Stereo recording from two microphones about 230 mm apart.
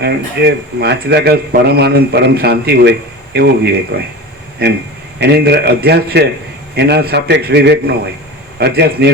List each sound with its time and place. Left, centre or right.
0.0 s speech: right
5.2 s speech: right